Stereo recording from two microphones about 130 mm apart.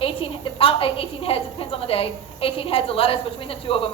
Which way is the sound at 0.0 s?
45° left (ahead or behind).